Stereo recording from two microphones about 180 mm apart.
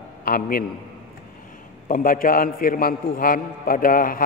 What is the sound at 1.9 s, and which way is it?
A man's voice, 50° left (ahead or behind).